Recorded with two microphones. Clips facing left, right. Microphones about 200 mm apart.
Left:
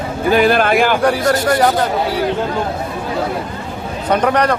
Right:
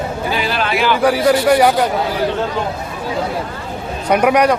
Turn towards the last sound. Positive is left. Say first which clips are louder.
# right 2 dB
turn(degrees=-10)  # may be behind; listen again after turning